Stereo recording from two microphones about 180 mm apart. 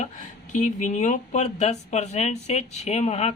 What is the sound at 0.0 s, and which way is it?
Speech, 40° left (ahead or behind).